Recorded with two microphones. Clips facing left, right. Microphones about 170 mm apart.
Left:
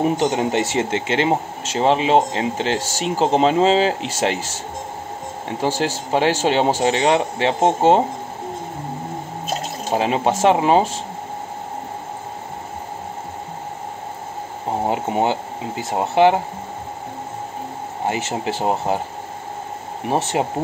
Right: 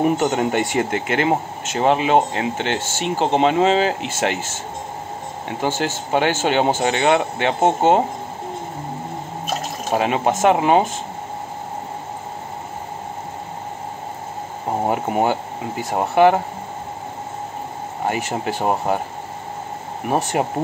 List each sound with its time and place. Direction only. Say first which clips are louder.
0.0 s speech: right 1 dB; 25° left (ahead or behind)
5.6 s speech: left 1 dB; 35° left (ahead or behind)
9.5 s speech: even; 30° left (ahead or behind)
14.9 s speech: right 1 dB; 25° left (ahead or behind)
18.0 s speech: even; 25° left (ahead or behind)
20.3 s speech: even; 25° left (ahead or behind)